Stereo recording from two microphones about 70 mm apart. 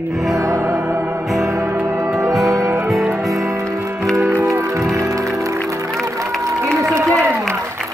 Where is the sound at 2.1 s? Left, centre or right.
Right.